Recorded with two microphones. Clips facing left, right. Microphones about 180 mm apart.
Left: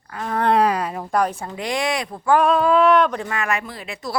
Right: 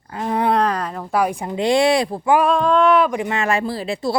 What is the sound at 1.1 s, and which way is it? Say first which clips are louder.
Speech: right 2 dB; 10° right (ahead or behind).